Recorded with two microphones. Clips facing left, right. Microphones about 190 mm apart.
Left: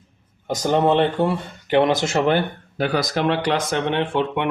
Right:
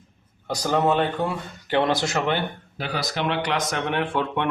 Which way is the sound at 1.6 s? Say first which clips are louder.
Left 4 dB; 20° left (ahead or behind).